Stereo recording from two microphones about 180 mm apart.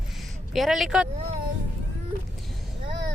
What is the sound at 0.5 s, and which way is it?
Speech, centre (ahead or behind).